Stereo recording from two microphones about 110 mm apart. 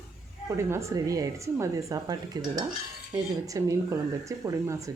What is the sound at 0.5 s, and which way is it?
Speech, 25° right (ahead or behind).